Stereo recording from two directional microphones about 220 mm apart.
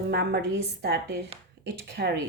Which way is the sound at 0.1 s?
50° right (ahead or behind).